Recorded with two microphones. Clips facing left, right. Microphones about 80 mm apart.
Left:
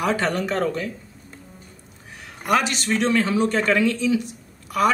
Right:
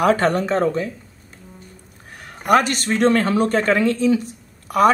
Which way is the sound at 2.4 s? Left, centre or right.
Right.